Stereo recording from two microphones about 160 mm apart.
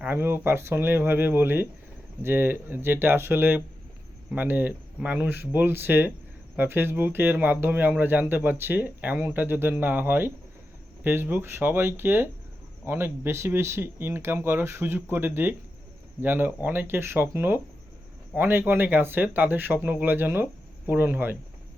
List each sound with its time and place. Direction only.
0.0 s speech: 15° right (ahead or behind)